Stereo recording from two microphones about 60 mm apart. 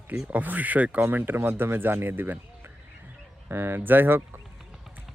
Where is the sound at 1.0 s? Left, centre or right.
Right.